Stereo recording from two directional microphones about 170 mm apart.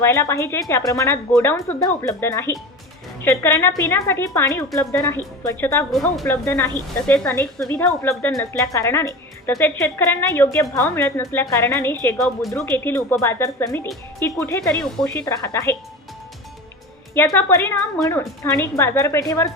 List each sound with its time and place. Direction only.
0.0 s a woman's voice: 15° left (ahead or behind)
5.9 s speech: centre (ahead or behind)
6.2 s a woman's voice: 15° left (ahead or behind)
14.6 s speech: 5° left (ahead or behind)
15.3 s a woman's voice: 20° left (ahead or behind)
17.5 s a woman's voice: 15° left (ahead or behind)